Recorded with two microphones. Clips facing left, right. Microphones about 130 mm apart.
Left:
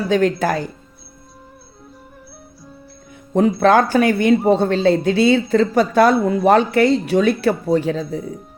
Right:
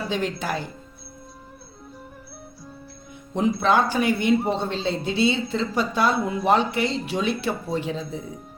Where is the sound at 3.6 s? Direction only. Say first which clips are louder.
Left 7 dB; 55° left (ahead or behind).